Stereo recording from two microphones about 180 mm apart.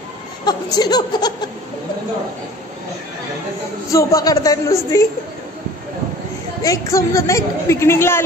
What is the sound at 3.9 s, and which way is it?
A woman's voice, 20° left (ahead or behind).